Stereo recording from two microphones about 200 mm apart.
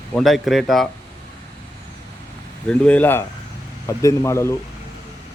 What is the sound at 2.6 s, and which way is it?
Speech, 5° left (ahead or behind).